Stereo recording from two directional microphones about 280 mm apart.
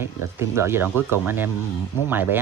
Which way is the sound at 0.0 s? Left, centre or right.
Centre.